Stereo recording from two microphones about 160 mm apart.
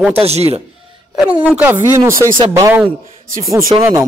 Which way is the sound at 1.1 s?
5° right (ahead or behind).